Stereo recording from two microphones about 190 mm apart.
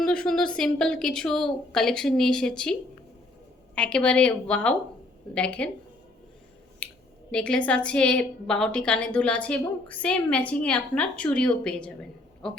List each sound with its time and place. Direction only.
0.0 s a woman's voice: 5° left (ahead or behind)
3.8 s a woman's voice: 5° left (ahead or behind)
6.8 s a sound: 5° left (ahead or behind)
7.3 s a woman's voice: 5° left (ahead or behind)